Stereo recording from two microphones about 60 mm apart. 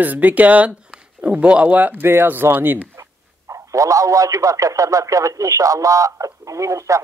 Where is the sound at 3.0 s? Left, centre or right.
Right.